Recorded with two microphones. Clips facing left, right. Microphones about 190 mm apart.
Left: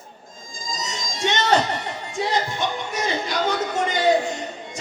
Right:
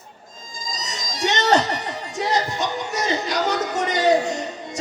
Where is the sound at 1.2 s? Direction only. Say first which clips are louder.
Right 1 dB; 40° right (ahead or behind).